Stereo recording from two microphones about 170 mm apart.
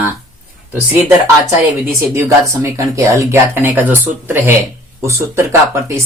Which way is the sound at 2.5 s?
20° right (ahead or behind).